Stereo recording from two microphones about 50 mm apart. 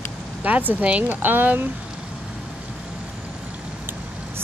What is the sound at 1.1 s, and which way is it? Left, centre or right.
Speech, right.